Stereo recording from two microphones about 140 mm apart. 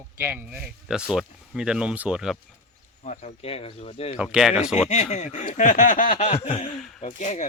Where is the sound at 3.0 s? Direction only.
55° left (ahead or behind).